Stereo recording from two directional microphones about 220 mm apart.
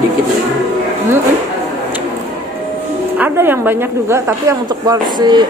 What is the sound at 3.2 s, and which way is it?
Speech, 10° right (ahead or behind).